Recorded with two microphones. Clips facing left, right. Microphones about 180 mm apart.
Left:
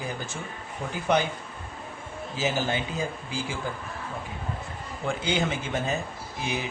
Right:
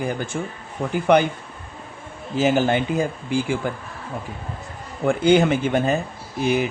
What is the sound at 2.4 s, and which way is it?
Speech, 60° right (ahead or behind).